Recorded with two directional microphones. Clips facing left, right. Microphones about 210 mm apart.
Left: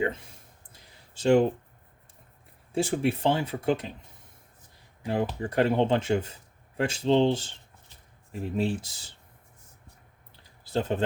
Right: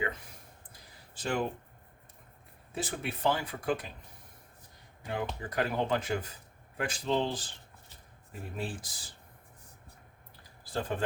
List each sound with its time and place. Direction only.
0.7 s a sound: 25° left (ahead or behind)
2.7 s speech: 30° left (ahead or behind)
5.0 s speech: 30° left (ahead or behind)
10.6 s speech: 25° left (ahead or behind)